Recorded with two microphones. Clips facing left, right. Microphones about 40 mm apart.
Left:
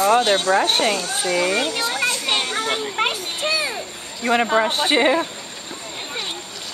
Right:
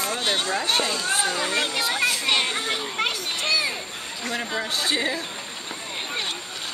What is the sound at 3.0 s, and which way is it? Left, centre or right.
Children playing, left.